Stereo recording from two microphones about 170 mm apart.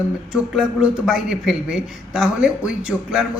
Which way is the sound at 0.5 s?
5° right (ahead or behind).